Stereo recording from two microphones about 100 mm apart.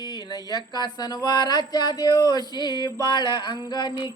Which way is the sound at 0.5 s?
45° left (ahead or behind).